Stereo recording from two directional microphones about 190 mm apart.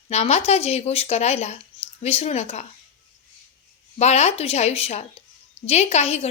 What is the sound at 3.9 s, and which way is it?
Speech, 35° left (ahead or behind).